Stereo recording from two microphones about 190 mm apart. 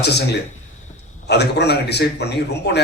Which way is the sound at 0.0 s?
60° left (ahead or behind).